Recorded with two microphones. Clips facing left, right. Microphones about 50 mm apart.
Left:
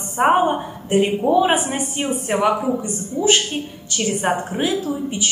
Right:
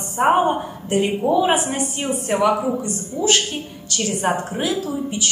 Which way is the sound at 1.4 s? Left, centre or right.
Centre.